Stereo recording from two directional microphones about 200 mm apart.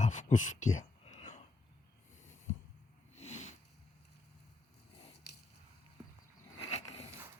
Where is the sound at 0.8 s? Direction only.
35° left (ahead or behind).